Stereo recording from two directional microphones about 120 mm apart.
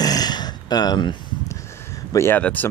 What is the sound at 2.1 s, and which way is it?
Speech, 20° left (ahead or behind).